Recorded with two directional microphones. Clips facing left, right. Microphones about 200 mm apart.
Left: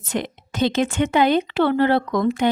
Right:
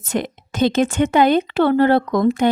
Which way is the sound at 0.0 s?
45° right (ahead or behind).